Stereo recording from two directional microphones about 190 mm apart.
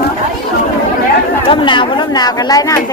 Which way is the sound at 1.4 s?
25° left (ahead or behind).